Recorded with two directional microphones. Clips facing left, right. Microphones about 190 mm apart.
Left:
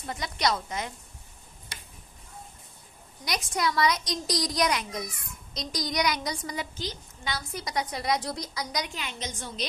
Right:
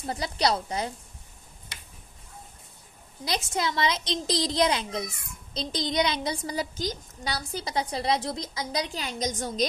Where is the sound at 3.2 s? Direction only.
25° right (ahead or behind).